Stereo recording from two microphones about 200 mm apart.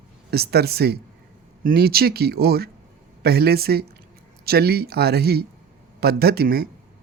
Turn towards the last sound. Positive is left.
turn(degrees=-50)  # may be behind; listen again after turning